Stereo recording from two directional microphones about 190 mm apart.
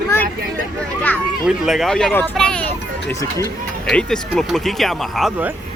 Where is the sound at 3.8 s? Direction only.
5° left (ahead or behind).